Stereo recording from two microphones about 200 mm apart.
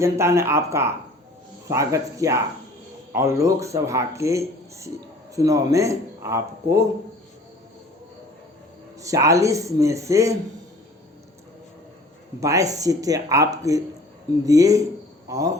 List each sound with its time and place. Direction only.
0.0 s speech: 15° right (ahead or behind)
9.0 s speech: 15° right (ahead or behind)
12.4 s speech: 15° right (ahead or behind)